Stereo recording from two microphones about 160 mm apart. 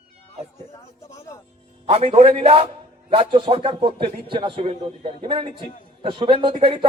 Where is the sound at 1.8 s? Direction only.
35° right (ahead or behind).